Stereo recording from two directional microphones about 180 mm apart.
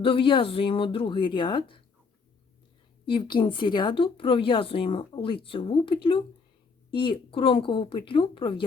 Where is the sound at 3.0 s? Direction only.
25° left (ahead or behind).